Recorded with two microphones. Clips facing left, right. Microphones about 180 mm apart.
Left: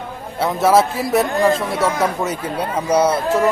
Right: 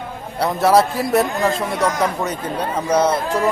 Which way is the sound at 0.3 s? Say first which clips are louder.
Even; centre (ahead or behind).